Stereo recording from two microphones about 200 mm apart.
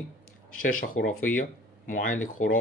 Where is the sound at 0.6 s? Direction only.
45° left (ahead or behind).